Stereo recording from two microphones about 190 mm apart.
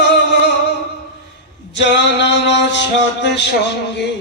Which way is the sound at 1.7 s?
65° left (ahead or behind).